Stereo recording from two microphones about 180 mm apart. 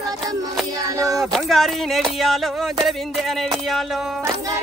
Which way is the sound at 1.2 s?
Centre (ahead or behind).